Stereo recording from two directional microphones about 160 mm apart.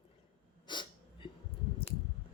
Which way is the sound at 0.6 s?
30° left (ahead or behind).